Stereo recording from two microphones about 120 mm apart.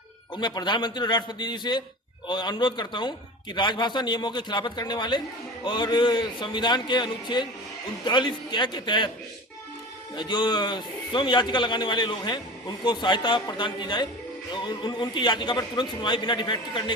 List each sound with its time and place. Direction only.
0.3 s a man's voice: 35° left (ahead or behind)
10.2 s a man's voice: 40° left (ahead or behind)